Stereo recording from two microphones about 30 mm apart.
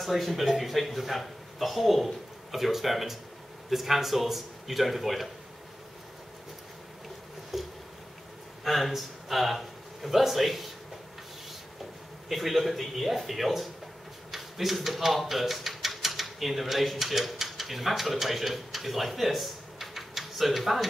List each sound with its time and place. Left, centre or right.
0.0 s speech: centre
7.5 s a sound: centre
8.6 s speech: centre
12.3 s speech: centre